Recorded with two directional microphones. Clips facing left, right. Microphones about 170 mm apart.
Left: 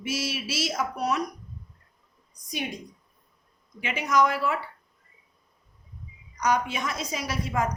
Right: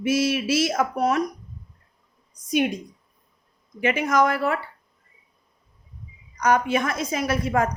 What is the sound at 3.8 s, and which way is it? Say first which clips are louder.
Speech: right 4 dB; 50° right (ahead or behind).